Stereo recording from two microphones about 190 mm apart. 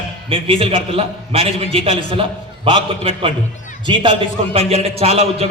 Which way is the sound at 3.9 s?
25° right (ahead or behind).